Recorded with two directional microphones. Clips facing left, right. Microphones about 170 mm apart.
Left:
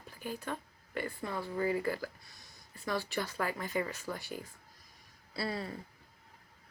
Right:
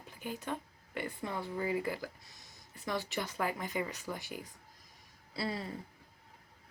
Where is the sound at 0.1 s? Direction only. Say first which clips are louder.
Even; 20° right (ahead or behind).